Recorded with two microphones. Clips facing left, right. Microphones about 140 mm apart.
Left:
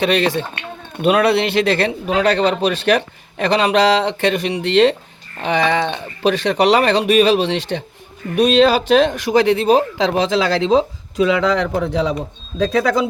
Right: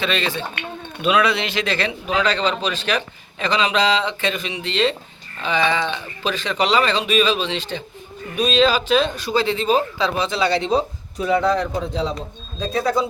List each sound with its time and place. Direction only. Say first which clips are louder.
0.0 s a man's voice: left 7 dB; 65° left (ahead or behind)
12.5 s speech: left 5 dB; 90° left